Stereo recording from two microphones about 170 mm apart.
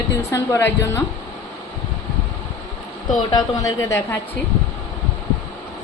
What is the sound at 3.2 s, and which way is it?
A woman's voice, 20° left (ahead or behind).